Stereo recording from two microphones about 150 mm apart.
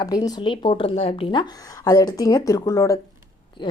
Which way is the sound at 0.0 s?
25° left (ahead or behind).